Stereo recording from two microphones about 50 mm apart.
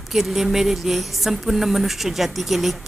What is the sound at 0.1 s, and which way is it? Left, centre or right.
A woman's voice, centre.